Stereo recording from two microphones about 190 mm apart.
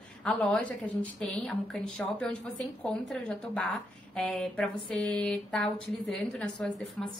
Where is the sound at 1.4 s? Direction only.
5° left (ahead or behind).